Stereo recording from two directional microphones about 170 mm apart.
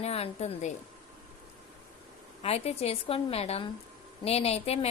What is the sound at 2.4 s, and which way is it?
A woman's voice, 35° left (ahead or behind).